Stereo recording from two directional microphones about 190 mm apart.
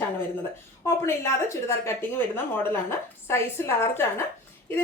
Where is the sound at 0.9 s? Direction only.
15° left (ahead or behind).